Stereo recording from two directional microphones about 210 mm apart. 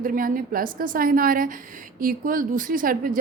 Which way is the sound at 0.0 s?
40° right (ahead or behind).